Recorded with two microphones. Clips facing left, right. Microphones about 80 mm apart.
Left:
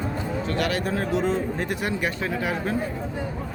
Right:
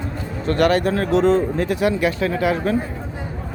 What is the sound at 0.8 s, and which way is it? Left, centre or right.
Speech, right.